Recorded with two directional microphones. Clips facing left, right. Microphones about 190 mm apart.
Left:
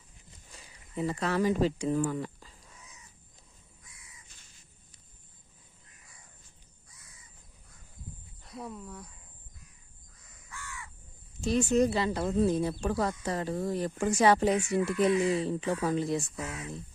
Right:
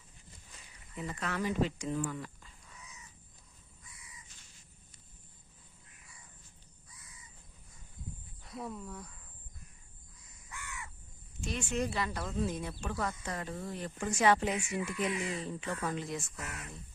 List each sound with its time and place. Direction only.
0.9 s speech: 35° left (ahead or behind)
8.4 s a sound: centre (ahead or behind)
10.5 s crow: 20° right (ahead or behind)
11.3 s speech: 35° left (ahead or behind)
16.3 s speech: 70° left (ahead or behind)